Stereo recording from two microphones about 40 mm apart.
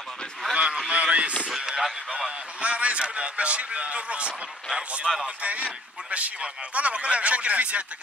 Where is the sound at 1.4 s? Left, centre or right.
Centre.